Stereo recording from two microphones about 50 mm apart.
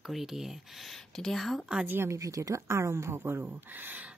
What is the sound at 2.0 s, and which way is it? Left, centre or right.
Speech, right.